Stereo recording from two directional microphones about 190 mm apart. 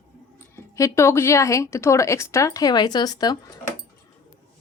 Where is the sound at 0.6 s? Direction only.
15° left (ahead or behind).